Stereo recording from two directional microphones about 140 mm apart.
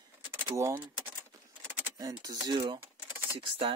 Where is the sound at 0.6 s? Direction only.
20° right (ahead or behind).